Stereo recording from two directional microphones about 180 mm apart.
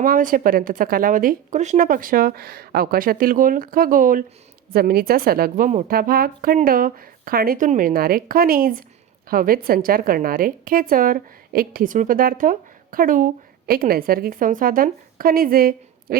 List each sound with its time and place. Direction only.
0.0 s a woman's voice: 50° right (ahead or behind)